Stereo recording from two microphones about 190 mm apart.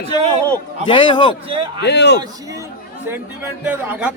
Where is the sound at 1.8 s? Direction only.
65° left (ahead or behind).